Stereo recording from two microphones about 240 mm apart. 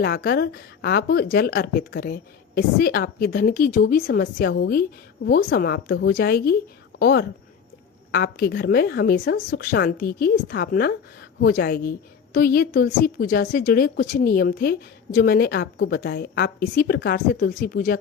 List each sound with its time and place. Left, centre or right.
0.0 s a woman's voice: left